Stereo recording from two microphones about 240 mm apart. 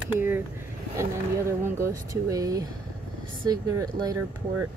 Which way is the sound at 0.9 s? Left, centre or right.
Centre.